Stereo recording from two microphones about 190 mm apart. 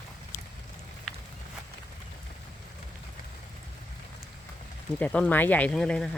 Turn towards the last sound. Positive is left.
turn(degrees=5)  # may be behind; listen again after turning